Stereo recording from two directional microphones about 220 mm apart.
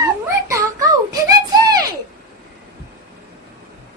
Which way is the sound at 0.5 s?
15° right (ahead or behind).